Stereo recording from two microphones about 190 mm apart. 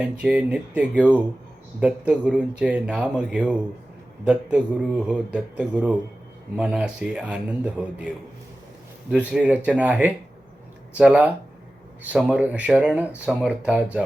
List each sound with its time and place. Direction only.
0.0 s speech: 5° right (ahead or behind)
9.0 s speech: 5° right (ahead or behind)